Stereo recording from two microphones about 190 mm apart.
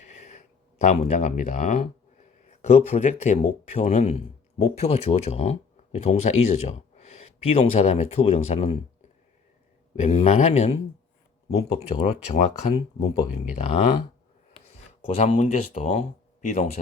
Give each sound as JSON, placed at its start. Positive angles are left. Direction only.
{"t": 0.0, "sound": "a sound", "side_deg": 40}
{"t": 2.6, "sound": "speech", "side_deg": 35}
{"t": 9.9, "sound": "speech", "side_deg": 35}
{"t": 15.0, "sound": "speech", "side_deg": 40}